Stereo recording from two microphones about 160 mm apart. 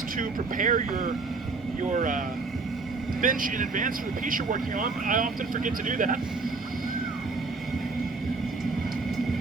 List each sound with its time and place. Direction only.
0.2 s speech: 55° right (ahead or behind)